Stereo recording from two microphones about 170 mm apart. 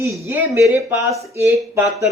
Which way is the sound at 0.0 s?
15° right (ahead or behind).